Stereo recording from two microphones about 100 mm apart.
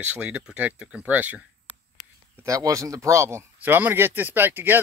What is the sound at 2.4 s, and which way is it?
Speech, 35° right (ahead or behind).